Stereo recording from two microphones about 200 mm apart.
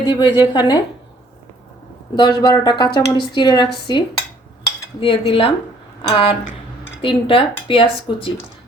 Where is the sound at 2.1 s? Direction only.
20° left (ahead or behind).